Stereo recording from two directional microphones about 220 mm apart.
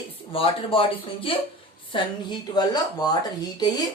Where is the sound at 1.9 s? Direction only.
20° left (ahead or behind).